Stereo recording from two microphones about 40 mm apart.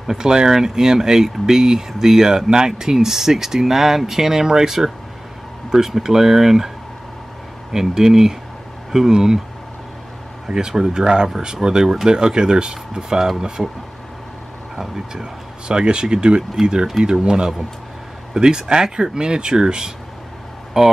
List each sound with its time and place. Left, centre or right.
0.0 s speech: centre
7.7 s speech: centre
10.4 s speech: centre
14.8 s speech: centre